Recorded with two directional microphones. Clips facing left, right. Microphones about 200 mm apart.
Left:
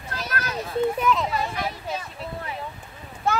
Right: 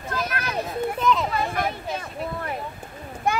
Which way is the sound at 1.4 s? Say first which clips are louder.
Right 3 dB; 50° right (ahead or behind).